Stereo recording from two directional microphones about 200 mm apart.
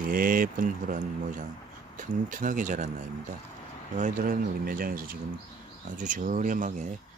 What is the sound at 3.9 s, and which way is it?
Speech, 40° right (ahead or behind).